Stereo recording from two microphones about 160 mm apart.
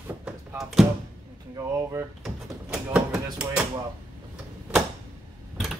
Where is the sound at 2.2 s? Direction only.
5° right (ahead or behind).